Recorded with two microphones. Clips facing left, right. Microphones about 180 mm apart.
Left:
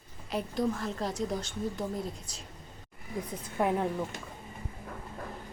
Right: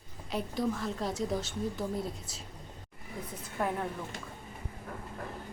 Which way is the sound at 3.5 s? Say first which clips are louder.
Left 5 dB; 20° left (ahead or behind).